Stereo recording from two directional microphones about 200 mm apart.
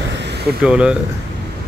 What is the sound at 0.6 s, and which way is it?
Speech, 5° right (ahead or behind).